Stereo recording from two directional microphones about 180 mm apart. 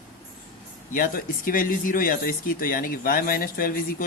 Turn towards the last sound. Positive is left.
turn(degrees=50)  # may be behind; listen again after turning